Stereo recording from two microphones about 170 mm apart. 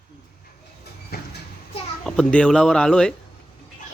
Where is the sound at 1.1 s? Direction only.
65° left (ahead or behind).